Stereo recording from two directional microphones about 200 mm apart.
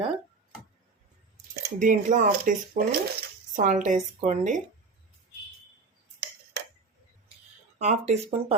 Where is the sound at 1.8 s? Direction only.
40° right (ahead or behind).